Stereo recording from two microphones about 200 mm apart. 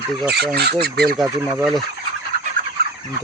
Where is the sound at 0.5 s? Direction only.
55° right (ahead or behind).